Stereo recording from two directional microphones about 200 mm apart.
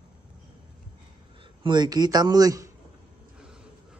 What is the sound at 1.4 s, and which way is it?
A man's voice, 25° right (ahead or behind).